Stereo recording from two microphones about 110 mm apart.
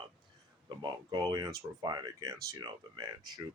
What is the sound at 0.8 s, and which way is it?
Speech, 40° right (ahead or behind).